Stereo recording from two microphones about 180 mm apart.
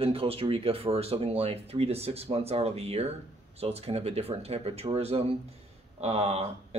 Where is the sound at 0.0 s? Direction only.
30° right (ahead or behind).